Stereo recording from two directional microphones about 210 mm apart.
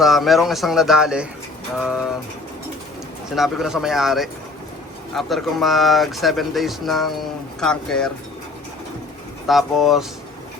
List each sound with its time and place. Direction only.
0.0 s speech: centre (ahead or behind)
3.3 s speech: centre (ahead or behind)
9.5 s speech: centre (ahead or behind)